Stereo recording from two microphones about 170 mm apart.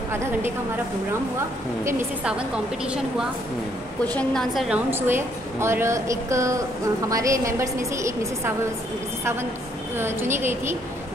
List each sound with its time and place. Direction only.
0.1 s a woman's voice: 15° right (ahead or behind)
1.9 s a woman's voice: 10° right (ahead or behind)
4.0 s a woman's voice: 5° left (ahead or behind); by 8.5 s 15° right (ahead or behind)
9.9 s a woman's voice: 15° right (ahead or behind)